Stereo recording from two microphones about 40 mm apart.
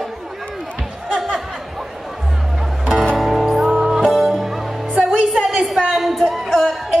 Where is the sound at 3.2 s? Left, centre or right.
Centre.